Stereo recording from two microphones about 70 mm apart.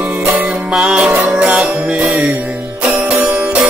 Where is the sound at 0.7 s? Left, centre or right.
Centre.